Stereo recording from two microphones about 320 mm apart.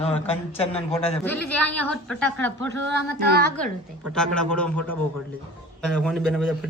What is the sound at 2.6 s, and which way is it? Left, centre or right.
Speech, right.